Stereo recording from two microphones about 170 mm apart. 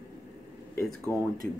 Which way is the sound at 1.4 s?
5° left (ahead or behind).